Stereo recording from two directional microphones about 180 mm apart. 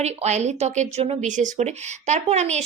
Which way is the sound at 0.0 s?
35° right (ahead or behind).